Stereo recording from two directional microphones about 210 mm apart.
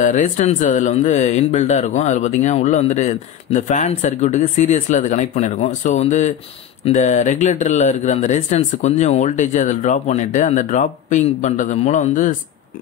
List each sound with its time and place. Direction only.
0.0 s speech: 35° left (ahead or behind)